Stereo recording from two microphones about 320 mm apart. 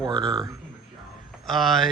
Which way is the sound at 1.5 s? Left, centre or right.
Centre.